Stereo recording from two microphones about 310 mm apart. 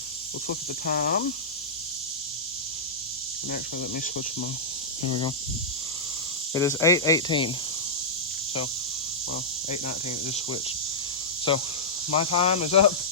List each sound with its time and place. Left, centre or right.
0.4 s speech: left
3.5 s speech: left
6.5 s speech: centre
11.5 s speech: centre